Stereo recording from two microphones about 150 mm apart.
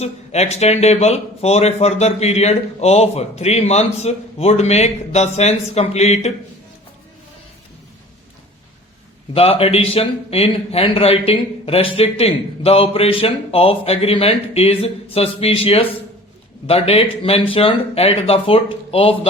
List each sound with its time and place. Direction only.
0.0 s a man's voice: 45° left (ahead or behind)
9.3 s a man's voice: 40° left (ahead or behind)